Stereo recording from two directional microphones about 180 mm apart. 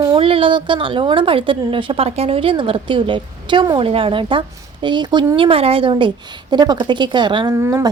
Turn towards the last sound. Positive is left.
turn(degrees=-15)  # may be behind; listen again after turning